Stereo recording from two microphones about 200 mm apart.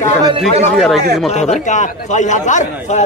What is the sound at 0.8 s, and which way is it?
Speech, centre (ahead or behind).